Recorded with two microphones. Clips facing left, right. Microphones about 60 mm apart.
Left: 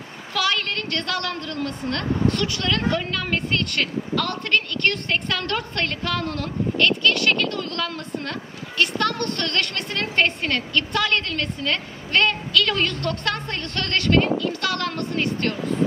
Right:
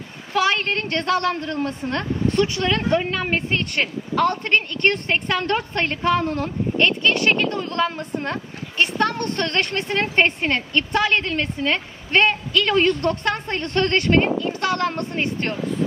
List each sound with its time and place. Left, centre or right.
0.3 s speech: right